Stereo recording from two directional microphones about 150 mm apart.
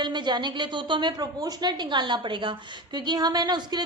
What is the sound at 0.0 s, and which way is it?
A woman's voice, 30° right (ahead or behind).